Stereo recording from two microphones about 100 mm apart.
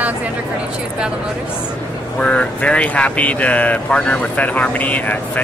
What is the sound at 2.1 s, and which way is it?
Speech, 10° left (ahead or behind).